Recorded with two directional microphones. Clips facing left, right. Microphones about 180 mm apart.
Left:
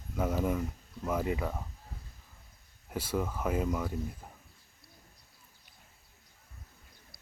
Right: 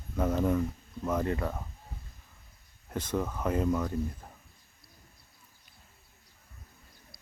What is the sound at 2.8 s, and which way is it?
Speech, 10° left (ahead or behind).